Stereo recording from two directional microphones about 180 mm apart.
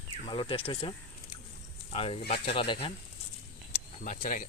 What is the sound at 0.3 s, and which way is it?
Speech, 30° left (ahead or behind).